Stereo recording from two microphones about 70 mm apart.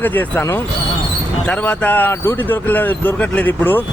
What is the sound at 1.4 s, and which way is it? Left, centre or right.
Speech, left.